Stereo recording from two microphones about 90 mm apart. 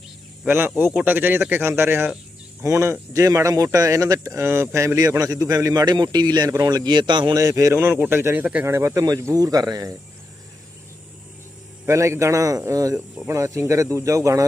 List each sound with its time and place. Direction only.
0.4 s speech: 25° right (ahead or behind); by 7.3 s 60° right (ahead or behind)
7.3 s speech: 35° right (ahead or behind)
9.0 s speech: 40° right (ahead or behind)
11.9 s speech: 35° right (ahead or behind)